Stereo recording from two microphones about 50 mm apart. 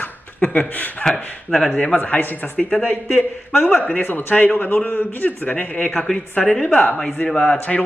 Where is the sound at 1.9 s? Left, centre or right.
Left.